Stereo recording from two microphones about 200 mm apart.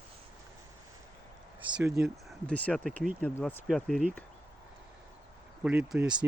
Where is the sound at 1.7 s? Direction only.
5° right (ahead or behind).